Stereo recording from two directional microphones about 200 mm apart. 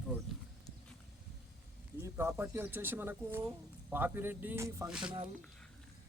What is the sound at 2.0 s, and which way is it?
Speech, 10° right (ahead or behind).